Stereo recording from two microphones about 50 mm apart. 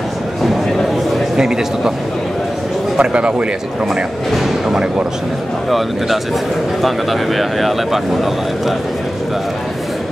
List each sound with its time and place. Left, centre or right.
1.3 s a man's voice: centre
3.0 s a man's voice: right
4.3 s speech: centre